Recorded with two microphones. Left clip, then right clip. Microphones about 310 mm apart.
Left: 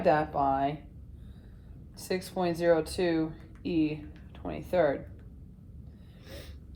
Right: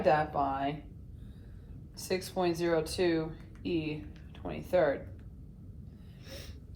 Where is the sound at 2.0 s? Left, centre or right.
Left.